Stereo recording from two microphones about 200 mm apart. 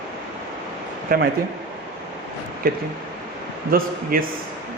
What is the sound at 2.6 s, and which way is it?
Speech, 50° right (ahead or behind).